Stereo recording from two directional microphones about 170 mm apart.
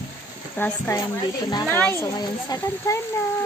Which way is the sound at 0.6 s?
15° left (ahead or behind).